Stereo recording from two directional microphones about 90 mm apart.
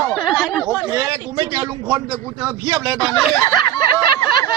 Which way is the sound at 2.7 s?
50° right (ahead or behind).